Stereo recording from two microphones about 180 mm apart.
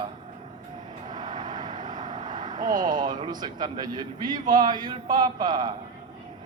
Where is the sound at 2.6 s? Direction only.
25° right (ahead or behind).